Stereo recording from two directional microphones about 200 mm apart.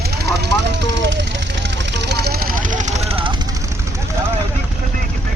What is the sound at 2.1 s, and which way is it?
Vehicle, 55° right (ahead or behind).